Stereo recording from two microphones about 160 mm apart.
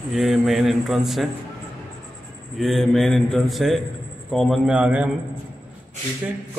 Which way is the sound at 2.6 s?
Centre (ahead or behind).